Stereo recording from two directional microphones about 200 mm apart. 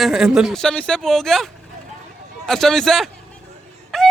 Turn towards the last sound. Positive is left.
turn(degrees=0)  # may be behind; listen again after turning